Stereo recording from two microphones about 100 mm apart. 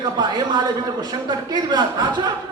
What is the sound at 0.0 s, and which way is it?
A man's voice, 45° right (ahead or behind).